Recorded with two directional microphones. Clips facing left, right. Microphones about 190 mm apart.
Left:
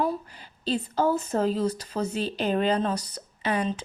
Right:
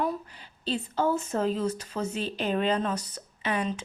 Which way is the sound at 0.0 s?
35° left (ahead or behind).